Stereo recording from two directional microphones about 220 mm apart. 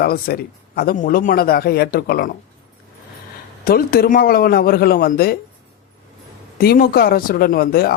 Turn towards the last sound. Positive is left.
turn(degrees=40)  # may be behind; listen again after turning